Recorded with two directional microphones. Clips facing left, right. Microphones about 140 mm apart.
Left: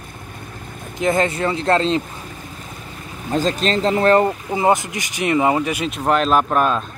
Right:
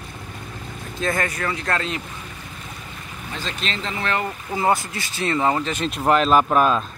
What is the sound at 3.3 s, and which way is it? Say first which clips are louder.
A man's voice: left 11 dB; 40° left (ahead or behind).